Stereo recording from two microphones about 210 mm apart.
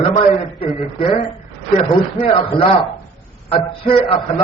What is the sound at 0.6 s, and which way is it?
A man's voice, 25° left (ahead or behind).